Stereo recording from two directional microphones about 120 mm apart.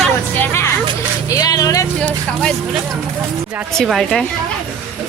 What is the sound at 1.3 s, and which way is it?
Vehicle, 30° left (ahead or behind).